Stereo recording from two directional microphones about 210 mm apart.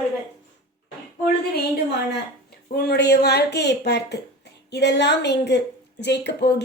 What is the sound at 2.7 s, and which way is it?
A woman's voice, 50° left (ahead or behind).